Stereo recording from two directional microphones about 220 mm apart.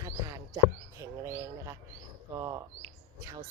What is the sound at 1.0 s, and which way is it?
Speech, 15° right (ahead or behind).